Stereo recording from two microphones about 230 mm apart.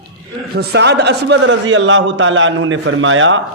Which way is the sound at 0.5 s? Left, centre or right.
Right.